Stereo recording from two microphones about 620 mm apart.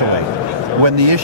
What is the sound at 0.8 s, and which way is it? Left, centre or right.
Speech, right.